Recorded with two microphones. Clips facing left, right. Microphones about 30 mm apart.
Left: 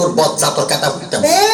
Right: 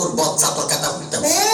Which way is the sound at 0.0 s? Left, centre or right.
Left.